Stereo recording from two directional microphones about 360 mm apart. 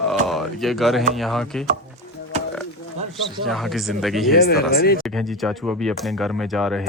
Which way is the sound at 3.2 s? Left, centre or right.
Centre.